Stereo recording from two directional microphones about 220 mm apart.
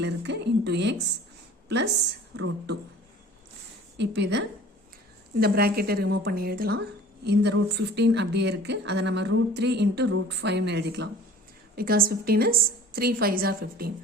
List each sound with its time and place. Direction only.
0.0 s speech: 50° right (ahead or behind)
2.3 s speech: 55° right (ahead or behind)
3.9 s speech: 50° right (ahead or behind)